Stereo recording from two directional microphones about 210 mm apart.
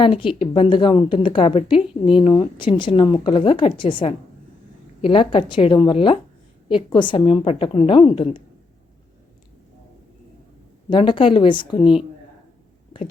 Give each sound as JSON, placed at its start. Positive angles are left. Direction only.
{"t": 0.0, "sound": "speech", "side_deg": 25}
{"t": 10.8, "sound": "speech", "side_deg": 25}
{"t": 11.8, "sound": "a woman's voice", "side_deg": -5}